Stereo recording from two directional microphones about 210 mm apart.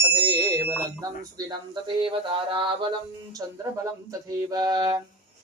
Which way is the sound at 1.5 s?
25° right (ahead or behind).